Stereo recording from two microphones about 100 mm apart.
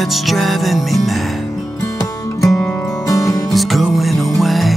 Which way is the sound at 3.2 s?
Centre (ahead or behind).